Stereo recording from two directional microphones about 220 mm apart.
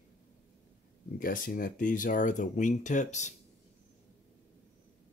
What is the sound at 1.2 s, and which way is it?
Speech, 40° left (ahead or behind).